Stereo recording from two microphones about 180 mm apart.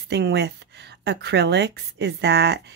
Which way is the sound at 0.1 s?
70° right (ahead or behind).